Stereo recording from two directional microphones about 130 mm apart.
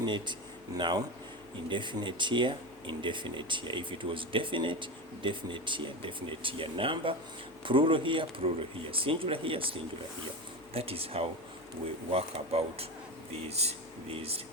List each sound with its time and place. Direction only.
0.0 s speech: 35° right (ahead or behind)